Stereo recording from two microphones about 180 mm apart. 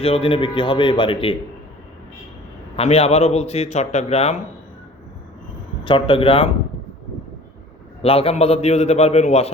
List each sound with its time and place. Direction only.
0.0 s a man's voice: 30° left (ahead or behind)
2.7 s a man's voice: 35° left (ahead or behind)
5.8 s a man's voice: 30° left (ahead or behind)
8.0 s a man's voice: 30° left (ahead or behind)